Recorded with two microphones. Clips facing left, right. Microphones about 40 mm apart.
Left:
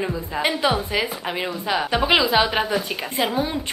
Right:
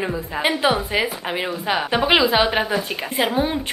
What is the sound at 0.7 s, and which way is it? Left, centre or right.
Speech, right.